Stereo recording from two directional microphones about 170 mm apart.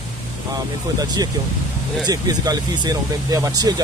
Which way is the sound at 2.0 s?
20° right (ahead or behind).